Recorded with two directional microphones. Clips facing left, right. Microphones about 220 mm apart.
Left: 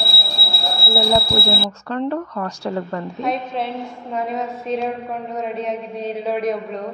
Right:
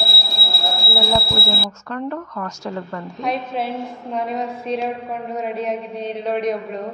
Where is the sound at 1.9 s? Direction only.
30° left (ahead or behind).